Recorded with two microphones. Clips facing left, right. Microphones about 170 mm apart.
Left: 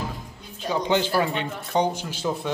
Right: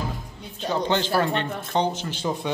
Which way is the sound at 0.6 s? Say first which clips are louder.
Left 1 dB; 10° left (ahead or behind).